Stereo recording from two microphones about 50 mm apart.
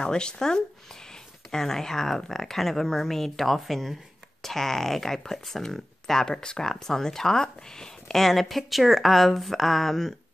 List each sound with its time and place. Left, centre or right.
0.0 s speech: centre